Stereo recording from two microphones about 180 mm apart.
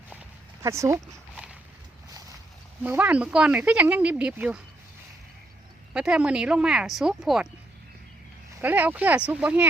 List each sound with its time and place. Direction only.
0.6 s speech: 15° right (ahead or behind)
2.8 s speech: 10° right (ahead or behind)
5.9 s speech: 5° right (ahead or behind)
8.6 s speech: 10° right (ahead or behind)